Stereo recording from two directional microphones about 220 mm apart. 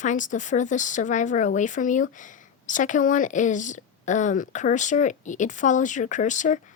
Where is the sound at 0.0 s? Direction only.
35° left (ahead or behind).